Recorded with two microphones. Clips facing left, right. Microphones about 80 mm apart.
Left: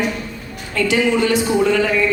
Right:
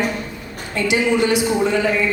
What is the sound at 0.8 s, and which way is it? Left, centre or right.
A man's voice, centre.